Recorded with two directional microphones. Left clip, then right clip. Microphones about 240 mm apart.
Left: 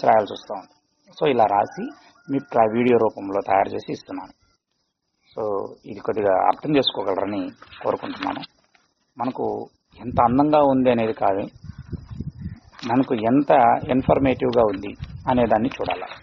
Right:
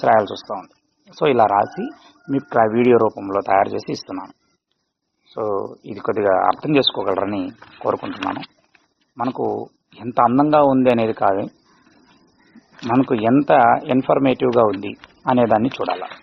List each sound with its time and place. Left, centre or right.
0.0 s a man's voice: right
5.3 s a man's voice: right
12.9 s a man's voice: right